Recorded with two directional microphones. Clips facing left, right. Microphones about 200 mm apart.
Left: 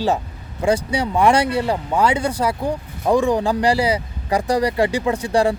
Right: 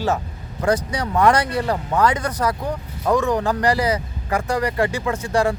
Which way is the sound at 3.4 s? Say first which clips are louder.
Left 2 dB; 30° left (ahead or behind).